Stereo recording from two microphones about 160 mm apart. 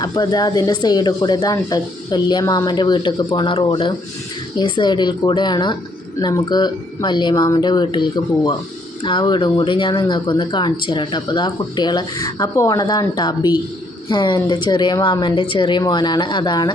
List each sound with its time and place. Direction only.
0.0 s speech: 25° left (ahead or behind)